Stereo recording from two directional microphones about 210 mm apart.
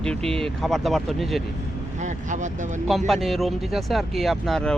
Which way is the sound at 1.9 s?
35° right (ahead or behind).